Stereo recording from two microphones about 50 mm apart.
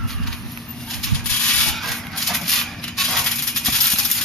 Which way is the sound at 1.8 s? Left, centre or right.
Centre.